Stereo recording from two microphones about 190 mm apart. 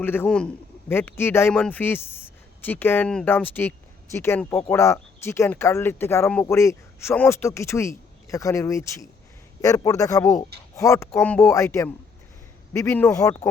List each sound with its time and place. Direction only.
0.0 s a man's voice: 10° left (ahead or behind)